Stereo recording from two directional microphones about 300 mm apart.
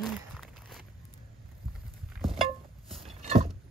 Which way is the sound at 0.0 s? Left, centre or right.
Centre.